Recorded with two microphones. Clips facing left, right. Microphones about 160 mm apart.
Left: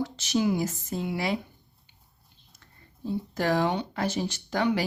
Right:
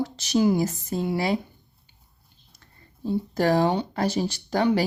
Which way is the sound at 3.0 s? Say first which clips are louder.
Right 5 dB; 40° right (ahead or behind).